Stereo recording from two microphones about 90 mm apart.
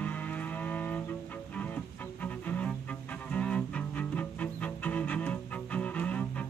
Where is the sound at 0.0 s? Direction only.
20° left (ahead or behind).